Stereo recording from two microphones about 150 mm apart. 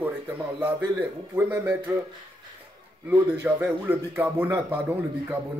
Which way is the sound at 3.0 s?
10° right (ahead or behind).